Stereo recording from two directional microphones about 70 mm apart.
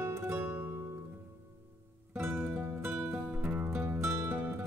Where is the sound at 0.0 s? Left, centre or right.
Right.